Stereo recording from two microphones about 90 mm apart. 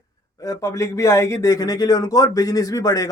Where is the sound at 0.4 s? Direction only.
40° left (ahead or behind).